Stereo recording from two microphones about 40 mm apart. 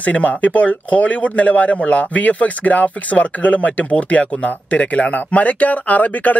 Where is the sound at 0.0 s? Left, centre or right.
Left.